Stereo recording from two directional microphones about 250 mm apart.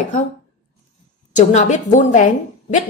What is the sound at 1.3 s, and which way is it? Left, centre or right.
Speech, left.